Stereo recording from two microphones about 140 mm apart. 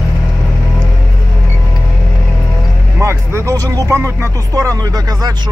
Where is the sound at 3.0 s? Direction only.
20° right (ahead or behind).